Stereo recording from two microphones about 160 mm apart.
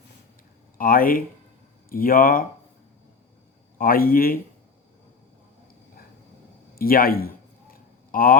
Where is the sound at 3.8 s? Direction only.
65° left (ahead or behind).